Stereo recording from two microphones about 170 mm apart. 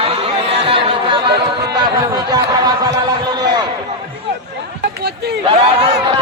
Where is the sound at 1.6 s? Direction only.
25° right (ahead or behind).